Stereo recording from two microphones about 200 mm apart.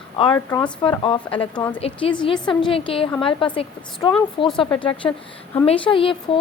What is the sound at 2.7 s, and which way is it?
Speech, 25° left (ahead or behind).